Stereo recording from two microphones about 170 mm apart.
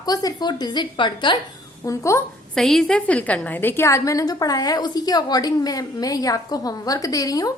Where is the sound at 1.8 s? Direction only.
15° left (ahead or behind).